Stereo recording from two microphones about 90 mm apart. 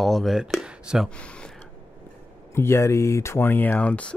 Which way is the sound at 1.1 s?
10° left (ahead or behind).